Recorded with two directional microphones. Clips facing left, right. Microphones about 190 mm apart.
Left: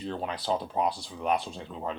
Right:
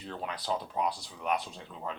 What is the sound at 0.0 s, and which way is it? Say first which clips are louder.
Speech: left 5 dB; 30° left (ahead or behind).